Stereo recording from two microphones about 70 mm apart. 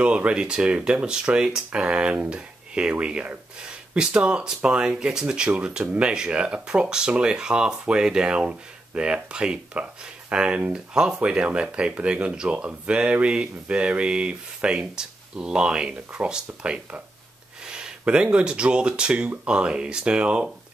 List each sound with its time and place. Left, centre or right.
0.0 s speech: centre